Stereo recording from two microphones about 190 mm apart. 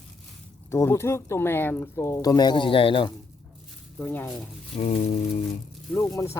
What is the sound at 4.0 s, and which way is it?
Speech, 10° left (ahead or behind).